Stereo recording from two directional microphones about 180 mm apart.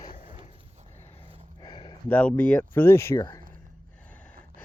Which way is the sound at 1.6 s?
25° left (ahead or behind).